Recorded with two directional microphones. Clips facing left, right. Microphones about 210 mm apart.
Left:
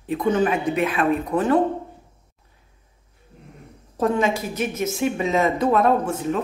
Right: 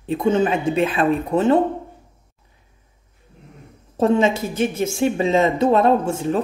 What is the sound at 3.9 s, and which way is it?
A woman's voice, 25° right (ahead or behind).